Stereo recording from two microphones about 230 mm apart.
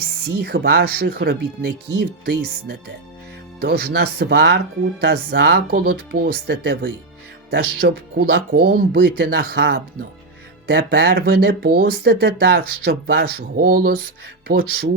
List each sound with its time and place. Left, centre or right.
0.3 s speech: right